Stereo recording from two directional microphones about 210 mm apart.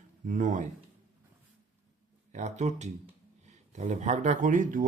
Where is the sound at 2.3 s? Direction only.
35° right (ahead or behind).